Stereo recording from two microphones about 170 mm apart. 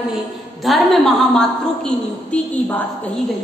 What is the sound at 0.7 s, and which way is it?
A woman's voice, centre (ahead or behind).